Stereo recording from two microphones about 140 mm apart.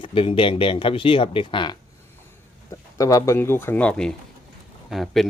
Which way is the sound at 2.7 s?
25° left (ahead or behind).